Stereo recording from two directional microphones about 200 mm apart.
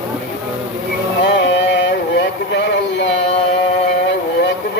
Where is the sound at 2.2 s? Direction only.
60° left (ahead or behind).